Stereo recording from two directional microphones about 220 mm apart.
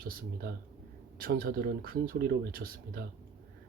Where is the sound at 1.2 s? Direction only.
40° right (ahead or behind).